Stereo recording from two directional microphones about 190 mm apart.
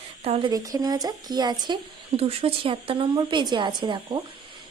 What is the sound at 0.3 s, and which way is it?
Speech, 25° right (ahead or behind).